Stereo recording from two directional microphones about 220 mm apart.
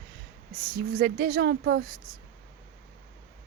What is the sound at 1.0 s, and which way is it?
Speech, 40° right (ahead or behind).